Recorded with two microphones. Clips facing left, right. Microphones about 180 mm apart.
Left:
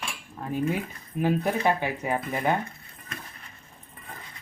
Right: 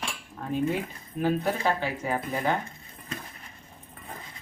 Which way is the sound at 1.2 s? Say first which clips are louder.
Left 1 dB; 15° left (ahead or behind).